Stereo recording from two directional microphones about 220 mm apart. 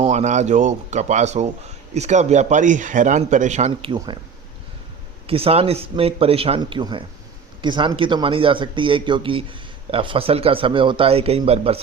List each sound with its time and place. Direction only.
0.0 s a man's voice: 30° right (ahead or behind)
5.2 s speech: 25° right (ahead or behind)